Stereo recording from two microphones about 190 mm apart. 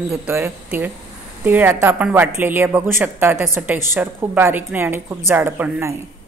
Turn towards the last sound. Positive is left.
turn(degrees=-10)  # may be behind; listen again after turning